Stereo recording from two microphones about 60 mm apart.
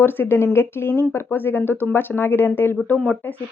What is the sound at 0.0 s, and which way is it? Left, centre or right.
Speech, left.